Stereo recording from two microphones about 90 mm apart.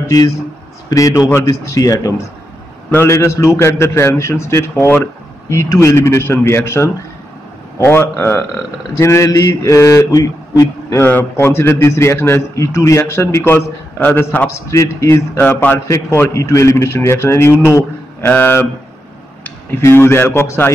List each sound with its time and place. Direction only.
0.1 s a man's voice: 45° left (ahead or behind)
0.8 s mantra: 40° left (ahead or behind)
7.8 s a man's voice: 25° left (ahead or behind)
8.9 s mantra: 30° left (ahead or behind)
11.0 s a man's voice: 25° left (ahead or behind)
14.5 s mantra: 35° left (ahead or behind)
15.3 s a man's voice: 20° left (ahead or behind)